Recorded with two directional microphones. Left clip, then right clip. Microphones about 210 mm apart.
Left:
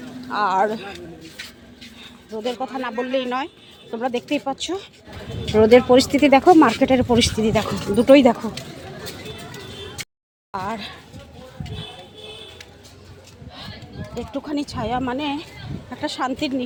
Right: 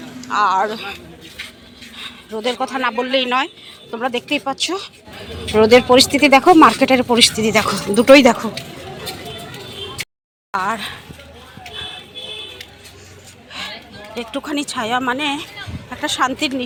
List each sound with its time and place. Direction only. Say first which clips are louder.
0.3 s speech: right 3 dB; 25° left (ahead or behind)
2.0 s speech: right 5 dB; 5° left (ahead or behind)
10.5 s speech: right 7 dB; 10° left (ahead or behind)
14.2 s speech: right 4 dB; 5° left (ahead or behind)